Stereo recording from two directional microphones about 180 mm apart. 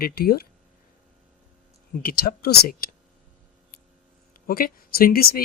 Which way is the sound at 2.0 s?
55° left (ahead or behind).